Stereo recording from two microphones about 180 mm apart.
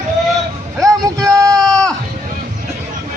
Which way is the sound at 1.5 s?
5° left (ahead or behind).